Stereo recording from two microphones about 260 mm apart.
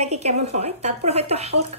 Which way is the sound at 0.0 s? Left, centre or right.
Right.